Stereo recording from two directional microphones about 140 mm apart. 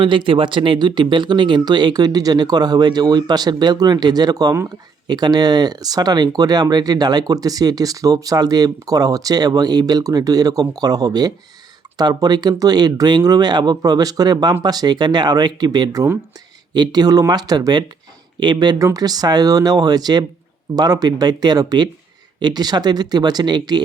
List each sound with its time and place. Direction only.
0.0 s speech: 35° right (ahead or behind)